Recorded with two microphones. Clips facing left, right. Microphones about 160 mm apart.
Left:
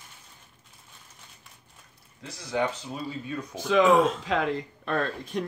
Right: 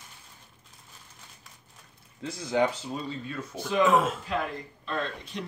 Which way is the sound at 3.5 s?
90° left.